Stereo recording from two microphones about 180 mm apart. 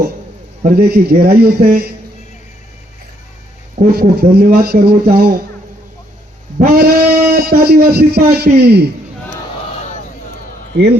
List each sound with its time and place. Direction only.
0.6 s speech: 55° right (ahead or behind)
3.9 s speech: 55° right (ahead or behind)
6.6 s a man's voice: 55° right (ahead or behind)